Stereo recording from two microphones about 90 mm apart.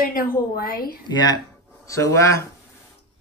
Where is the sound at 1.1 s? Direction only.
50° left (ahead or behind).